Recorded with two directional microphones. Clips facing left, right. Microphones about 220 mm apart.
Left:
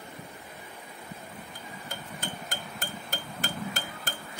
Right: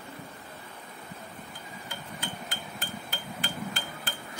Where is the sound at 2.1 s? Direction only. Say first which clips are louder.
Even; 45° left (ahead or behind).